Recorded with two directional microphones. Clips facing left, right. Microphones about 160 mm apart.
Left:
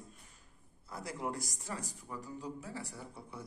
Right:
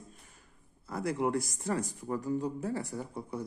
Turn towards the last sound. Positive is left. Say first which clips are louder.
# right 10 dB
turn(degrees=-50)  # may be behind; listen again after turning